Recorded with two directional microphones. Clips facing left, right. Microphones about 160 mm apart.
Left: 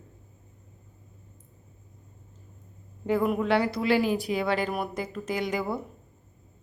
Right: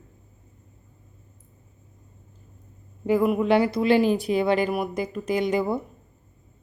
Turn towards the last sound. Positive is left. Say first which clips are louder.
# right 6 dB
turn(degrees=-20)  # may be behind; listen again after turning